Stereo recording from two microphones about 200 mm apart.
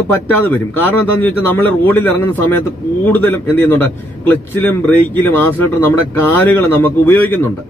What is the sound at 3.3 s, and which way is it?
Speech, 10° left (ahead or behind).